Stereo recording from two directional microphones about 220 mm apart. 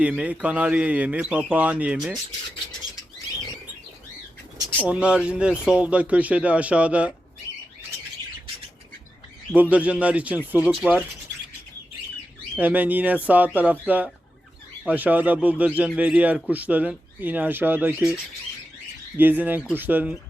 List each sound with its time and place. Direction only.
0.0 s speech: 5° right (ahead or behind)
4.8 s speech: 5° right (ahead or behind)
9.5 s a man's voice: 5° right (ahead or behind)
12.5 s a man's voice: 5° right (ahead or behind)
19.1 s a man's voice: 10° right (ahead or behind)